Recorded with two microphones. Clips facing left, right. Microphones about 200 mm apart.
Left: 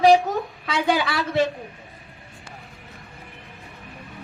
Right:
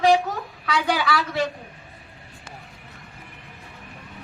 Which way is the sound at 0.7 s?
20° left (ahead or behind).